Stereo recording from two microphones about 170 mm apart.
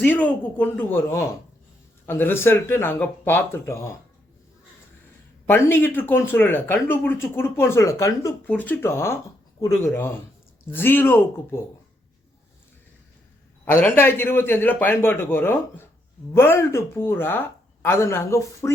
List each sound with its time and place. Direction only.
0.0 s speech: 10° left (ahead or behind)
5.5 s speech: 15° left (ahead or behind)
13.7 s speech: 10° left (ahead or behind)